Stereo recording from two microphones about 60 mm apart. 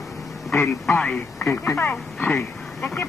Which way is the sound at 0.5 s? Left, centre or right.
Left.